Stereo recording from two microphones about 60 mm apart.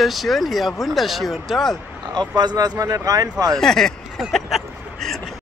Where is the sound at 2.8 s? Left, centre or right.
Right.